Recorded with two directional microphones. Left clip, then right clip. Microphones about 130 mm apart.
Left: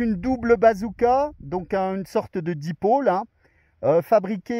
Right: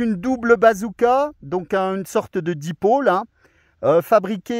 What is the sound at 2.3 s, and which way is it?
Speech, 35° right (ahead or behind).